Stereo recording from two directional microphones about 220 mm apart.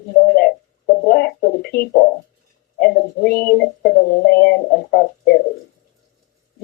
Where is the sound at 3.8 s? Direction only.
45° left (ahead or behind).